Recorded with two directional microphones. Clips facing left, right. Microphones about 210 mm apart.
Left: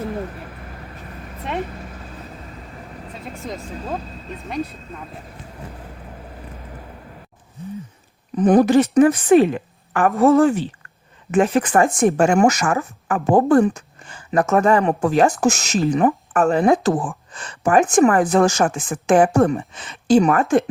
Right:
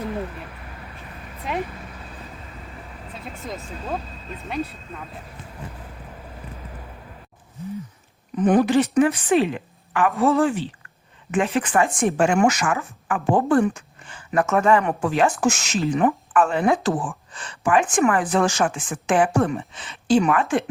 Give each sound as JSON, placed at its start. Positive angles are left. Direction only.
{"t": 8.4, "sound": "a woman's voice", "side_deg": 40}